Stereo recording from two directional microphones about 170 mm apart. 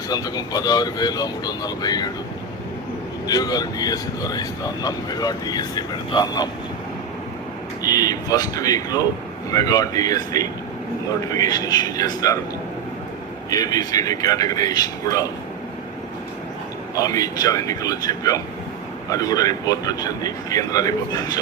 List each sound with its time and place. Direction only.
0.1 s a man's voice: 25° left (ahead or behind)
3.2 s a man's voice: 20° left (ahead or behind)
7.8 s a man's voice: 20° left (ahead or behind)
13.5 s a man's voice: 20° left (ahead or behind)
17.0 s a man's voice: 20° left (ahead or behind)